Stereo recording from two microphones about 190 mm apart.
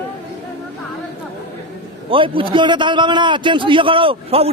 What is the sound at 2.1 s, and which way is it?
A man's voice, 25° right (ahead or behind).